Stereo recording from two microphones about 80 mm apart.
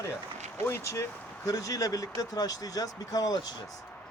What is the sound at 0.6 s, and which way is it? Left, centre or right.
Speech, left.